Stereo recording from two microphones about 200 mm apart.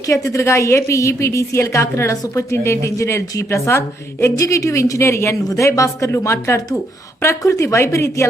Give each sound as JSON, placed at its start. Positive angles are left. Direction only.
{"t": 0.1, "sound": "a woman's voice", "side_deg": 15}